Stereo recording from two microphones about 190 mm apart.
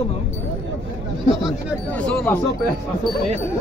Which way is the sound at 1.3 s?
Centre (ahead or behind).